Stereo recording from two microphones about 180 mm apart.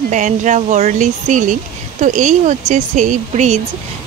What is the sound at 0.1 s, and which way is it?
Speech, 45° right (ahead or behind).